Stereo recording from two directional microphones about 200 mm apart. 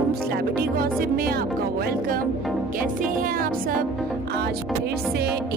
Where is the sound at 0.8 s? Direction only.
45° right (ahead or behind).